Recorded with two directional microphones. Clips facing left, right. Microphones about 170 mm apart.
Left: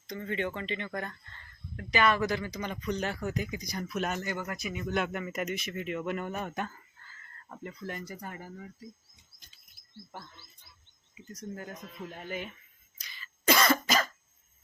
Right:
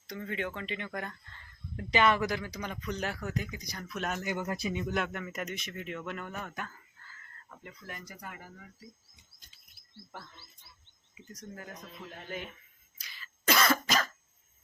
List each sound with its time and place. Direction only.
0.1 s speech: 5° right (ahead or behind)
1.7 s speech: 20° right (ahead or behind); by 4.2 s 5° left (ahead or behind)
4.2 s speech: 15° right (ahead or behind)
4.5 s speech: 30° right (ahead or behind)
4.9 s speech: centre (ahead or behind)
6.1 s speech: 20° left (ahead or behind)
7.5 s speech: 35° left (ahead or behind)
11.3 s speech: 30° left (ahead or behind)
13.0 s cough: 5° right (ahead or behind)